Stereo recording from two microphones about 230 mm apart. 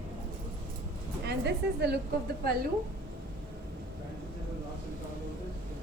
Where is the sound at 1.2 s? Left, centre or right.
Right.